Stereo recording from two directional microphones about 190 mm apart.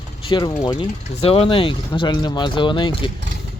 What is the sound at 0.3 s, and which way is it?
Speech, 25° left (ahead or behind).